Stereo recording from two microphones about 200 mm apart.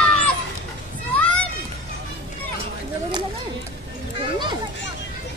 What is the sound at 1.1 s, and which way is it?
Music, 5° left (ahead or behind).